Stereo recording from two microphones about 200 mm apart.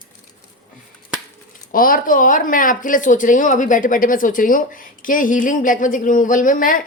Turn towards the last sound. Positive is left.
turn(degrees=40)  # may be behind; listen again after turning